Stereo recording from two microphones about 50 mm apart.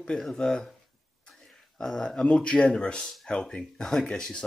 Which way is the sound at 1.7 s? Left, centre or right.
Centre.